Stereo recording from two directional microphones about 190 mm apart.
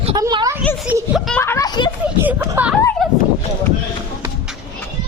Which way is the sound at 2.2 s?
10° right (ahead or behind).